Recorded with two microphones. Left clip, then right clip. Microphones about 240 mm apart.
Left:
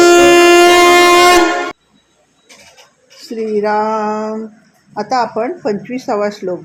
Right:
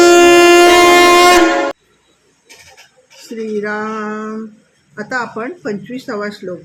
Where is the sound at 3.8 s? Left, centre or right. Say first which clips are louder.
Left 6 dB; left.